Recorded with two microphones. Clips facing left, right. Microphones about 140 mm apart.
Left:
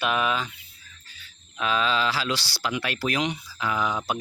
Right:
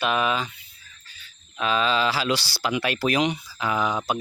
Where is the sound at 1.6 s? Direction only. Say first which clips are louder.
Right 2 dB; centre (ahead or behind).